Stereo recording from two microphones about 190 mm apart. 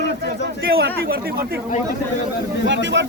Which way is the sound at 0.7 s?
55° right (ahead or behind).